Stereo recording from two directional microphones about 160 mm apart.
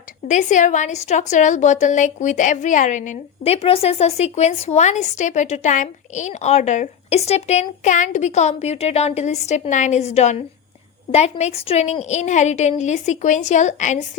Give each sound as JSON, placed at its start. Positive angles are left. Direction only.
{"t": 0.3, "sound": "a woman's voice", "side_deg": 50}